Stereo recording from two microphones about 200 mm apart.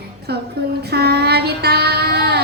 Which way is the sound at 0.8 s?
55° right (ahead or behind).